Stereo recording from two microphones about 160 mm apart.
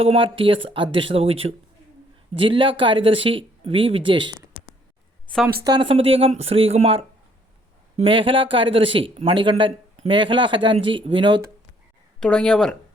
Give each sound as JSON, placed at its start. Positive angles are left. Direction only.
{"t": 0.0, "sound": "speech", "side_deg": -35}
{"t": 5.6, "sound": "speech", "side_deg": -30}
{"t": 12.2, "sound": "speech", "side_deg": 5}